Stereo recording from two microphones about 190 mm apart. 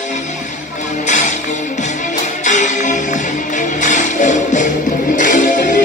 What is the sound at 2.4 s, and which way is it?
Music, 40° left (ahead or behind).